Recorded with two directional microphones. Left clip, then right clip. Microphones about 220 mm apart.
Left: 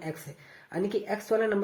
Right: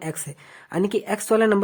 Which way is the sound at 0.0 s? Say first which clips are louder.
Right 6 dB; 40° right (ahead or behind).